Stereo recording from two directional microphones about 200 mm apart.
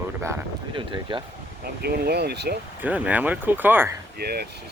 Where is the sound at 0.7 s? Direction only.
25° right (ahead or behind).